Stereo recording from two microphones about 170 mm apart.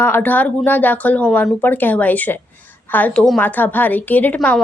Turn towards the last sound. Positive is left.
turn(degrees=10)  # may be behind; listen again after turning